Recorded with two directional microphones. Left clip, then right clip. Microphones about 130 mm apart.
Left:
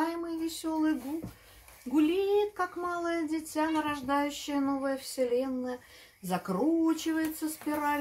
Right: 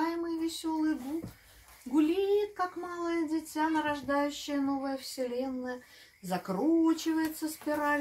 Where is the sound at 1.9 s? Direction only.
25° left (ahead or behind).